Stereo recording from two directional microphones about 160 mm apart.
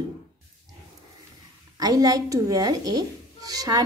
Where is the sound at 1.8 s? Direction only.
25° right (ahead or behind).